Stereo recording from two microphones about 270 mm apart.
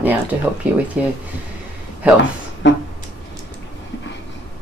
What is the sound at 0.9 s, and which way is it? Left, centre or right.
Speech, centre.